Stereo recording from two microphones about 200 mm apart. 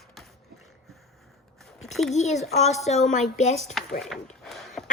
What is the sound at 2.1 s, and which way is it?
Speech, 35° left (ahead or behind).